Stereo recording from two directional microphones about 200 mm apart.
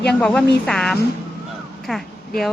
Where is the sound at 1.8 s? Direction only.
Centre (ahead or behind).